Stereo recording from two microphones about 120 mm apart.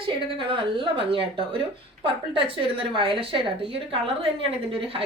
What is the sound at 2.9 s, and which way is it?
Speech, 45° right (ahead or behind).